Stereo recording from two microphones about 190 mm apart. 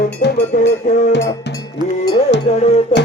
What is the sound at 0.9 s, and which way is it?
Music, 40° left (ahead or behind).